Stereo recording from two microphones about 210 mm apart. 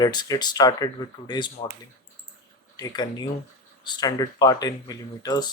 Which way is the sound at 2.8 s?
20° left (ahead or behind).